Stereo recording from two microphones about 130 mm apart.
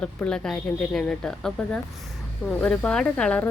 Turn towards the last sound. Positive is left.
turn(degrees=10)  # may be behind; listen again after turning